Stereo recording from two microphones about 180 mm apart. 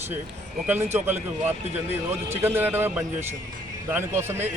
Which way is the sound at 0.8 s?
40° right (ahead or behind).